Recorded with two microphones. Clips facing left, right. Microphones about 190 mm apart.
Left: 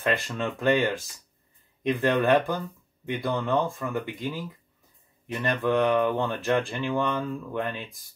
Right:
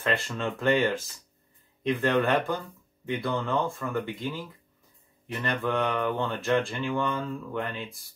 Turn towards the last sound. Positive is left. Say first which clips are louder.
# left 2 dB
turn(degrees=15)  # may be behind; listen again after turning